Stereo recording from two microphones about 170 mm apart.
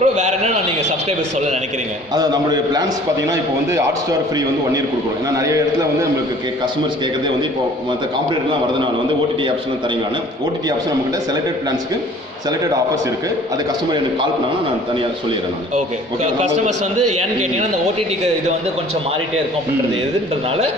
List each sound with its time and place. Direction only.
0.0 s a man's voice: 45° right (ahead or behind)
2.1 s a man's voice: 25° right (ahead or behind)
5.3 s a man's voice: 20° right (ahead or behind)
17.2 s a man's voice: 40° right (ahead or behind)